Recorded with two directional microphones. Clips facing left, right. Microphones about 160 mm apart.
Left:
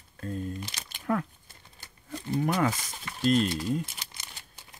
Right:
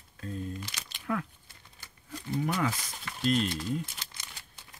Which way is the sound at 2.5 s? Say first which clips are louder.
Left 4 dB; 50° left (ahead or behind).